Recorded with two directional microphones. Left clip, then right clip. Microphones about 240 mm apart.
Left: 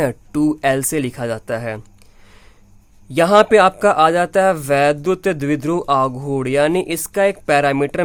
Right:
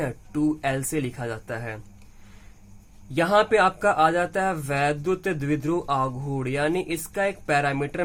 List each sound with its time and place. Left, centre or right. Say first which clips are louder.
0.0 s speech: left 8 dB; left
3.1 s speech: left 9 dB; left